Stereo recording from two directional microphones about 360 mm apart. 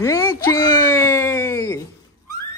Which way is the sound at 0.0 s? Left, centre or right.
Centre.